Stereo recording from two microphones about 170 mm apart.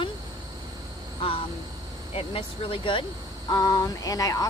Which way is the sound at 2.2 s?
30° left (ahead or behind).